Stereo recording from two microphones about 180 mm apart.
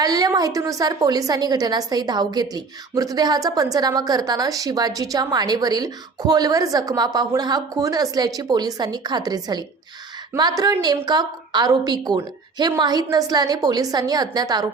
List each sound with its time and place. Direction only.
0.0 s a woman's voice: 20° right (ahead or behind)